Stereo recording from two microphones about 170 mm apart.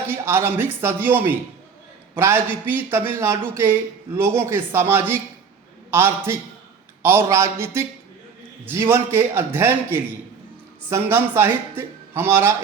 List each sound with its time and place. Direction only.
0.1 s a man's voice: 15° right (ahead or behind)